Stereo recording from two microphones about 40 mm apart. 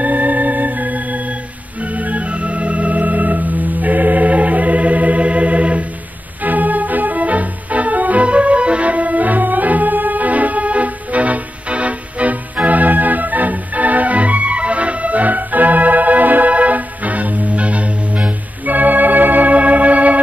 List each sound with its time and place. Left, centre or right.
0.0 s organ: right
6.4 s music: right
18.7 s organ: right